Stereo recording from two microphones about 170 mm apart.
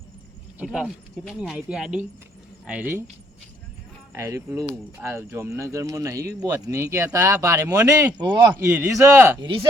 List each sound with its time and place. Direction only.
0.6 s speech: 5° right (ahead or behind)
4.1 s speech: 15° right (ahead or behind)
8.6 s speech: 10° right (ahead or behind)